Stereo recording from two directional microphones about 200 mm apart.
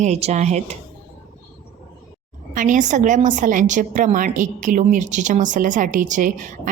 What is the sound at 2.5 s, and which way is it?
A woman's voice, 40° right (ahead or behind).